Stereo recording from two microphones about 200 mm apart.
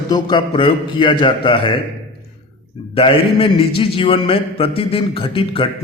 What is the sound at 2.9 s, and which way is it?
A man's voice, 25° left (ahead or behind).